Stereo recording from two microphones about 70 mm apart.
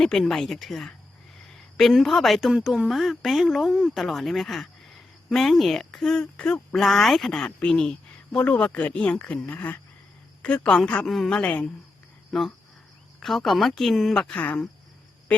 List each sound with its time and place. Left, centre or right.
0.0 s a woman's voice: centre
2.5 s a woman's voice: centre
6.7 s speech: centre
11.0 s a woman's voice: centre
11.3 s speech: left
12.3 s a woman's voice: centre
14.2 s speech: centre